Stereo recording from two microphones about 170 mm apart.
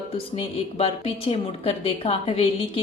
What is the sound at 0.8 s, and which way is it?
A woman's voice, 35° left (ahead or behind).